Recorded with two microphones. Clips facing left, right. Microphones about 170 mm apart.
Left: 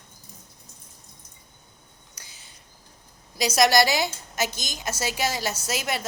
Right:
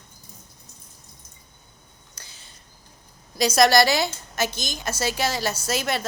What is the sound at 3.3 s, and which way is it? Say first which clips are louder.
Speech: right 2 dB; 15° left (ahead or behind).